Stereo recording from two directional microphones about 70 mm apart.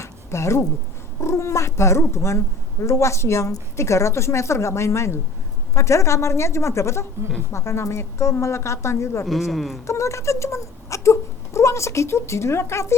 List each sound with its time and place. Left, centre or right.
0.0 s a sound: left
1.2 s a woman's voice: left
9.2 s speech: centre
9.8 s speech: left